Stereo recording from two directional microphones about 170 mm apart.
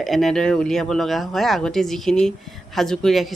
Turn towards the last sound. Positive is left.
turn(degrees=0)  # may be behind; listen again after turning